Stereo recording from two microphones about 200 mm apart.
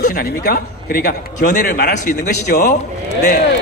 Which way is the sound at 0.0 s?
50° left (ahead or behind).